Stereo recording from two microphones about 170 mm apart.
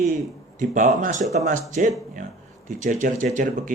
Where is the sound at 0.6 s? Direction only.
50° right (ahead or behind).